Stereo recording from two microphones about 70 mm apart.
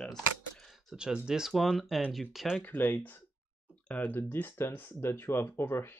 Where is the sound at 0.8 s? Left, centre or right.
Centre.